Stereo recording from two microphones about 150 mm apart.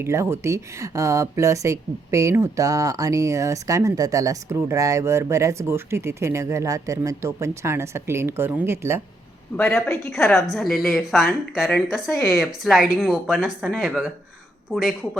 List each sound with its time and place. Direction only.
0.0 s speech: 20° right (ahead or behind)
9.6 s a man's voice: 15° left (ahead or behind)
10.3 s speech: centre (ahead or behind)